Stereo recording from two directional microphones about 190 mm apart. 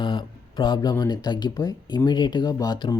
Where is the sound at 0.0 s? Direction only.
25° left (ahead or behind).